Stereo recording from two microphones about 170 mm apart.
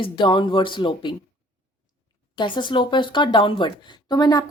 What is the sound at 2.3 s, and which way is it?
Speech, 30° left (ahead or behind).